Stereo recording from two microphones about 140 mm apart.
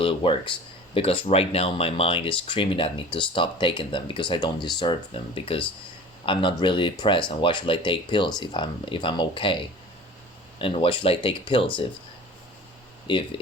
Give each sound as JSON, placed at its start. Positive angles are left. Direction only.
{"t": 0.0, "sound": "speech", "side_deg": 40}
{"t": 13.1, "sound": "speech", "side_deg": 35}